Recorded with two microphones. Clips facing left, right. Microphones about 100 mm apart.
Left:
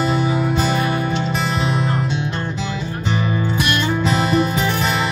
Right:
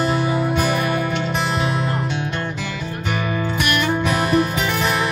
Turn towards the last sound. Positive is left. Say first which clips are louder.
# left 1 dB
turn(degrees=25)  # may be behind; listen again after turning